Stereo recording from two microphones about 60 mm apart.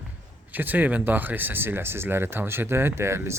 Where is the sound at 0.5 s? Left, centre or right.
Right.